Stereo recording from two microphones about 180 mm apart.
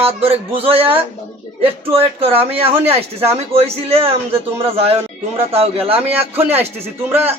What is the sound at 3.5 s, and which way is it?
Speech, 30° right (ahead or behind).